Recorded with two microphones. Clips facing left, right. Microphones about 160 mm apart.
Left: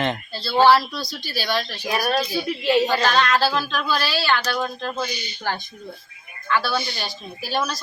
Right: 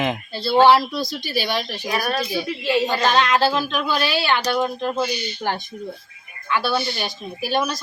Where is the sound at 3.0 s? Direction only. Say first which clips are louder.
Right 2 dB; 20° right (ahead or behind).